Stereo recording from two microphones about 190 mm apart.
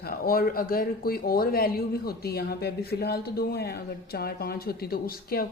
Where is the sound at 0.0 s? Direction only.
50° left (ahead or behind).